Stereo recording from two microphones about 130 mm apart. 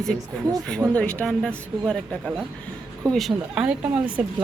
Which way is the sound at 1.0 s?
10° left (ahead or behind).